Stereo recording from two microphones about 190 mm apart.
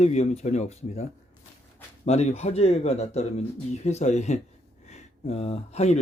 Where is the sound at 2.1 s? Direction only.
35° left (ahead or behind).